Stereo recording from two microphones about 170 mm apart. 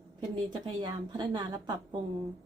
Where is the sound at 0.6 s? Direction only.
25° right (ahead or behind).